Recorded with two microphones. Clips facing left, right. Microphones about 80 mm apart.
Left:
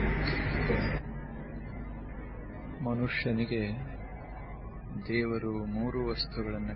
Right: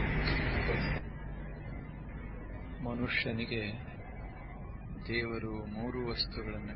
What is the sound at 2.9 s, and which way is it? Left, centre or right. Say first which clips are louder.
Speech: left 4 dB; centre.